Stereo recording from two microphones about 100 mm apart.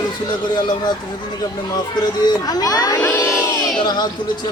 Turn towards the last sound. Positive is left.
turn(degrees=45)  # may be behind; listen again after turning